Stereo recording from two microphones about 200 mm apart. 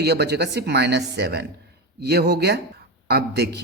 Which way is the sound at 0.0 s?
55° right (ahead or behind).